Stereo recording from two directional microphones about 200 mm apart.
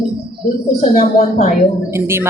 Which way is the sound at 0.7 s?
40° left (ahead or behind).